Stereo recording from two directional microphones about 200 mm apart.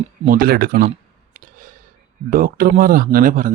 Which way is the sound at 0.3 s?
45° right (ahead or behind).